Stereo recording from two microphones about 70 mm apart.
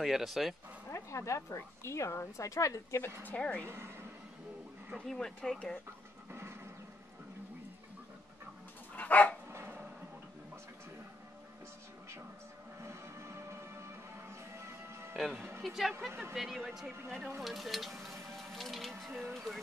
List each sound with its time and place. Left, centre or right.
0.0 s speech: centre
0.9 s speech: left
3.3 s a woman's voice: centre
3.6 s a woman's voice: right
4.9 s speech: centre
6.3 s horse: right
8.9 s dog: left
9.5 s a sound: right
12.8 s music: right
15.1 s speech: centre
18.3 s music: centre
19.3 s a sound: centre